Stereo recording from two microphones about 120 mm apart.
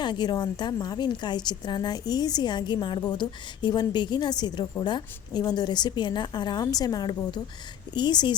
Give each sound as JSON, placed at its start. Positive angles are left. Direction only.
{"t": 0.0, "sound": "a woman's voice", "side_deg": 40}